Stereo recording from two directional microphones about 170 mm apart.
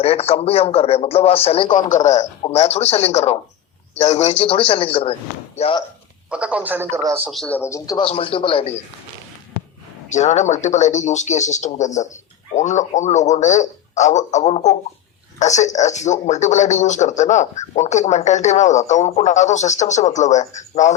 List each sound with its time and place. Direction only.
0.0 s speech: 35° left (ahead or behind)
6.3 s speech: 5° right (ahead or behind)
7.3 s speech: 5° left (ahead or behind)
8.0 s speech: 35° left (ahead or behind)
10.1 s a man's voice: 45° left (ahead or behind)